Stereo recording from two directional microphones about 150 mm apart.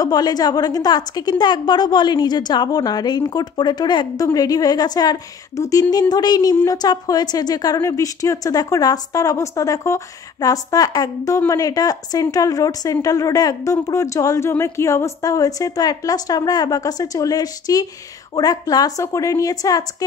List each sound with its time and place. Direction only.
0.0 s a woman's voice: 25° left (ahead or behind)